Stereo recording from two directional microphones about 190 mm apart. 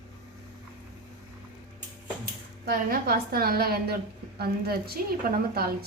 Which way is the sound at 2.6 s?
55° right (ahead or behind).